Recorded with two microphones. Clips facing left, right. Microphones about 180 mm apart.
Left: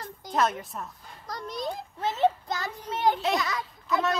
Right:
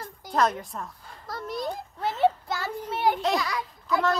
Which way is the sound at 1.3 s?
20° left (ahead or behind).